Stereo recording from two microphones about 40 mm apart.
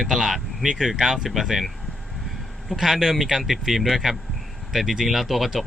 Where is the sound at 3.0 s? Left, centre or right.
Centre.